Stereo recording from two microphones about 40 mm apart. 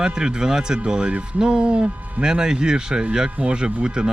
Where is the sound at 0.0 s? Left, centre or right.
Centre.